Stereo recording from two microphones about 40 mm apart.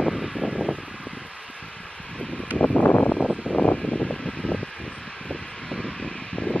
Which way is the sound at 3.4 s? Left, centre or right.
Left.